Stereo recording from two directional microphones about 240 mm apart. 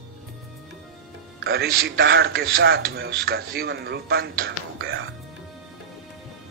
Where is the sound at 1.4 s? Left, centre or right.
Right.